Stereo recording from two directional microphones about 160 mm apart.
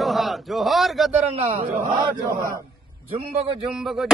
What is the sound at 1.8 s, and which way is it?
Speech, 30° right (ahead or behind).